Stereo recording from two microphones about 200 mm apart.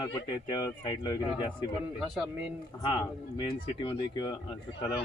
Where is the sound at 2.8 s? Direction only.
20° left (ahead or behind).